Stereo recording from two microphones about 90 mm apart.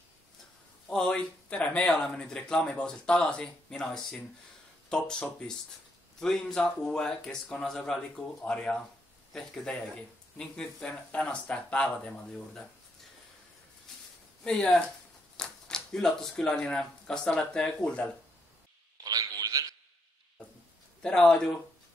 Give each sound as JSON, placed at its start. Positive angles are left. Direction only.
{"t": 0.8, "sound": "speech", "side_deg": 10}
{"t": 14.4, "sound": "speech", "side_deg": 10}
{"t": 19.0, "sound": "a sound", "side_deg": -45}
{"t": 21.0, "sound": "speech", "side_deg": 10}